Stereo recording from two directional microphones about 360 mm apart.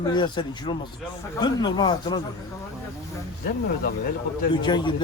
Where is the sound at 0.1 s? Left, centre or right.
Centre.